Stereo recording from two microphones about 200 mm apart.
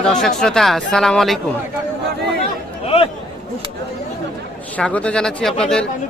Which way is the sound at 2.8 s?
30° left (ahead or behind).